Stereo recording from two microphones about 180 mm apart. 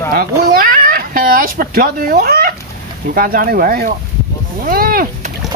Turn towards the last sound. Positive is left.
turn(degrees=-55)  # may be behind; listen again after turning